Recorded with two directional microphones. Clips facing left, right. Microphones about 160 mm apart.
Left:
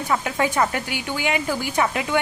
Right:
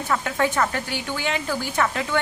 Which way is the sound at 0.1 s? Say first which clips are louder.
Even; 15° left (ahead or behind).